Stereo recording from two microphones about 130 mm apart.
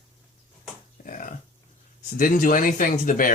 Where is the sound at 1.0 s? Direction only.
90° left.